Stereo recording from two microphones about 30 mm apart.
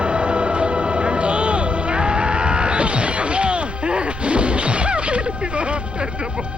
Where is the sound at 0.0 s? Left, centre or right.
Right.